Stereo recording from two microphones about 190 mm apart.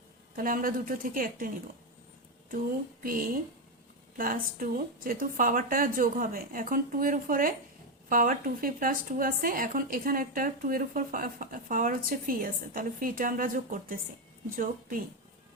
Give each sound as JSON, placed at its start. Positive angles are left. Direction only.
{"t": 0.3, "sound": "speech", "side_deg": -45}
{"t": 3.0, "sound": "a woman's voice", "side_deg": -45}